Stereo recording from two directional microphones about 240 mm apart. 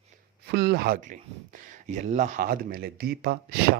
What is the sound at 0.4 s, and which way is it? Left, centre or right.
Speech, right.